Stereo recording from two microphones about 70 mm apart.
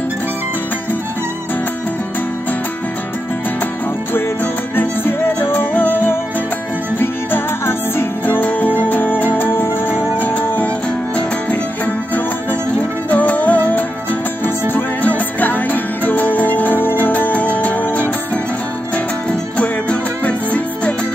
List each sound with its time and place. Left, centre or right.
4.7 s music: left
19.5 s music: centre